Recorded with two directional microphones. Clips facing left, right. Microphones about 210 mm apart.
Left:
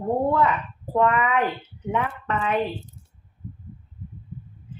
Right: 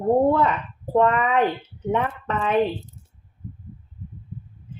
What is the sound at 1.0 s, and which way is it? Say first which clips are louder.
Speech: right 2 dB; 35° right (ahead or behind).